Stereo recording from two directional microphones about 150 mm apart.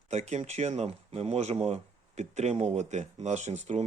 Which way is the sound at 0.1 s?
45° right (ahead or behind).